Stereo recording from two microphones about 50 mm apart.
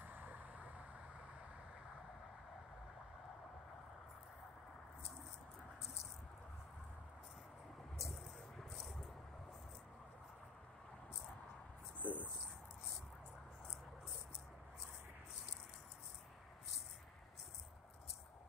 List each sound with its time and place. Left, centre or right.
0.0 s vehicle: right
8.0 s rattle: centre
12.0 s a sound: left